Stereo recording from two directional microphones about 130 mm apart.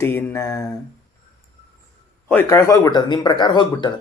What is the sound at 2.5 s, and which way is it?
Speech, 25° left (ahead or behind).